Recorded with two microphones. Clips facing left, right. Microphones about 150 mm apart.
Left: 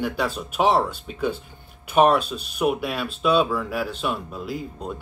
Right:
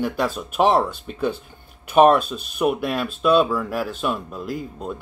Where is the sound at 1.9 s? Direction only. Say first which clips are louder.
Right 3 dB; centre (ahead or behind).